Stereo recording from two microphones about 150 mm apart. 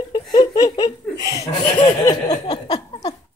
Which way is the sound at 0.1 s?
30° left (ahead or behind).